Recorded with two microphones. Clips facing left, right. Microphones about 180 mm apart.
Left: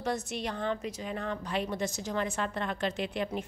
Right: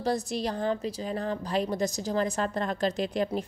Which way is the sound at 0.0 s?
35° right (ahead or behind).